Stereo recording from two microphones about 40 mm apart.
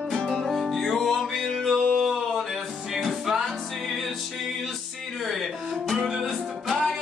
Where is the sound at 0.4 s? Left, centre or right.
Centre.